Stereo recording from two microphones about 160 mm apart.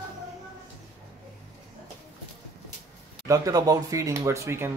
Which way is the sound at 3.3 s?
20° right (ahead or behind).